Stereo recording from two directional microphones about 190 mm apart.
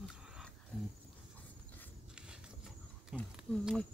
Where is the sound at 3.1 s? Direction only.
Centre (ahead or behind).